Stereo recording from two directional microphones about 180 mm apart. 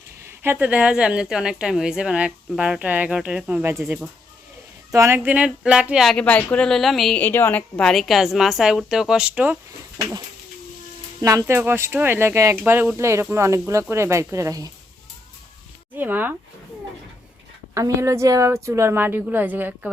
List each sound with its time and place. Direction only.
0.3 s speech: 10° right (ahead or behind)
11.2 s a woman's voice: 15° right (ahead or behind)
16.0 s a woman's voice: 10° right (ahead or behind)
17.7 s a woman's voice: 15° right (ahead or behind)